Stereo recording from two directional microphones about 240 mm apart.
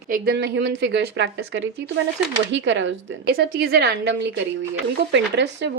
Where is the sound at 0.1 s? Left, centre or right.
Right.